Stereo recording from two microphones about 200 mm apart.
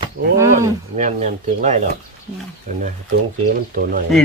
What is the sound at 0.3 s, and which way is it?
Wild animals, 15° right (ahead or behind).